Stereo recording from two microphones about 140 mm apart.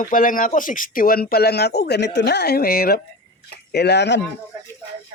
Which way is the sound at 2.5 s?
90° left.